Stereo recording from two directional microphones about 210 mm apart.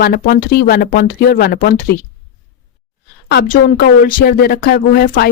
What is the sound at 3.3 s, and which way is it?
Speech, 50° left (ahead or behind).